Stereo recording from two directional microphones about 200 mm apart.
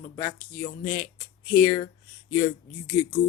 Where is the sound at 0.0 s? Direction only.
35° left (ahead or behind).